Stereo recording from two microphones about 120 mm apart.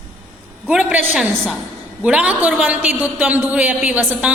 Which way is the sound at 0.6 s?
10° right (ahead or behind).